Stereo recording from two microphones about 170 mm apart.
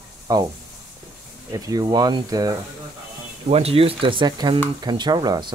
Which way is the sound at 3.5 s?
35° right (ahead or behind).